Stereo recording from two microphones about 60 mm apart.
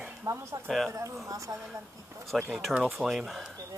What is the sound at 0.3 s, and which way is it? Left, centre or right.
Speech, right.